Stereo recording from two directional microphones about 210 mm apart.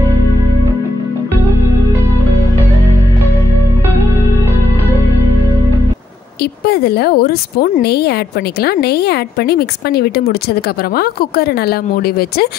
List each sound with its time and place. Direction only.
6.4 s a woman's voice: 50° left (ahead or behind)